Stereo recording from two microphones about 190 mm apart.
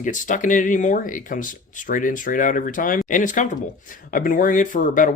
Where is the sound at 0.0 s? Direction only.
40° left (ahead or behind).